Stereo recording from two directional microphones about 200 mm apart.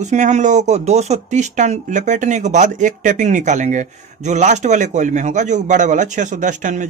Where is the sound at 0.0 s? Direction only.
35° right (ahead or behind).